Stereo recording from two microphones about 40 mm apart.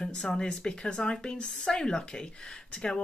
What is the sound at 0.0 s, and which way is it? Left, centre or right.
A woman's voice, centre.